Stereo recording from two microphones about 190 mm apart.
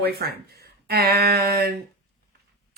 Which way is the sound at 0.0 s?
55° right (ahead or behind).